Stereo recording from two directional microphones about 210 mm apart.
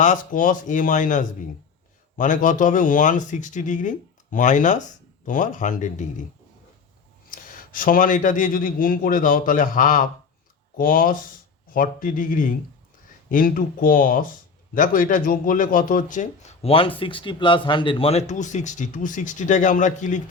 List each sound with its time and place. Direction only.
0.0 s speech: 40° left (ahead or behind)
7.3 s speech: 40° left (ahead or behind)